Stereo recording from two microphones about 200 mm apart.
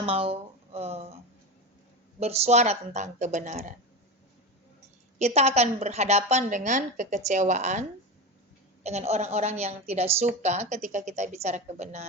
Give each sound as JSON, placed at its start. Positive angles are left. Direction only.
{"t": 0.0, "sound": "a sound", "side_deg": -30}
{"t": 2.1, "sound": "a woman's voice", "side_deg": -30}
{"t": 5.2, "sound": "a woman's voice", "side_deg": -30}